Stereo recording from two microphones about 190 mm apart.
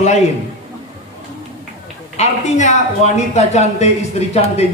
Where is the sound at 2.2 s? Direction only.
35° left (ahead or behind).